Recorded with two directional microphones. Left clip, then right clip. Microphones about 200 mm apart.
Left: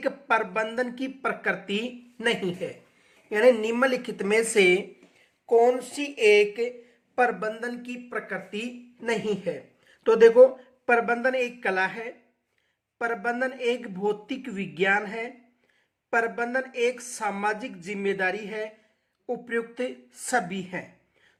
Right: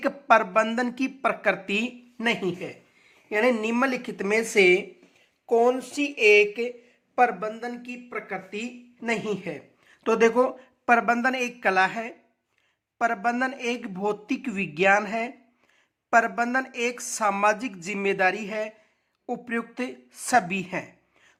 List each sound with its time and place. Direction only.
0.0 s speech: 35° right (ahead or behind)